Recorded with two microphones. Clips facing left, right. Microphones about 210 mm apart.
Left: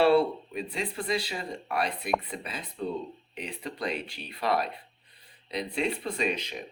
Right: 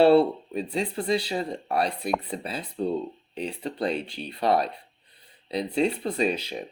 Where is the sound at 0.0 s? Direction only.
30° right (ahead or behind).